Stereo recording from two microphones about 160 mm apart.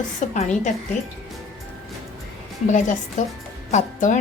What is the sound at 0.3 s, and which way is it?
Speech, 50° left (ahead or behind).